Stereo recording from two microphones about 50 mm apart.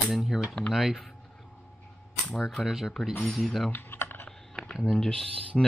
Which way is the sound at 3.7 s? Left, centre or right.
Left.